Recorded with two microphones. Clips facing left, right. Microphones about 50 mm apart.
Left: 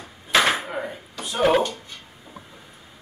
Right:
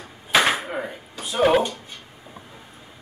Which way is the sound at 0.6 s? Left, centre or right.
Centre.